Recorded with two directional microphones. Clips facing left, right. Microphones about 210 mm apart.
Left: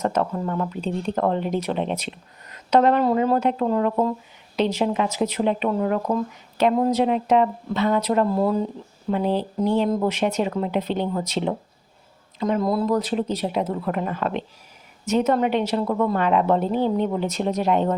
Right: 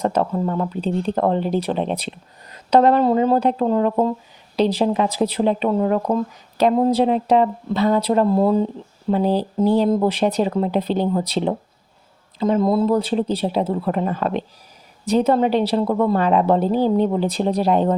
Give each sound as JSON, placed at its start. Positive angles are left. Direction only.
{"t": 0.0, "sound": "speech", "side_deg": -30}